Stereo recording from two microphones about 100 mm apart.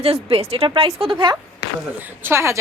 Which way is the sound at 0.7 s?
70° right (ahead or behind).